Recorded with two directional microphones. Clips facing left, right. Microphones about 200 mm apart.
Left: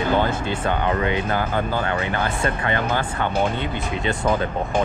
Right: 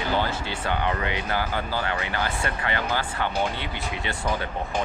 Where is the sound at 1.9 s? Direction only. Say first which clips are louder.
Left 4 dB; 25° left (ahead or behind).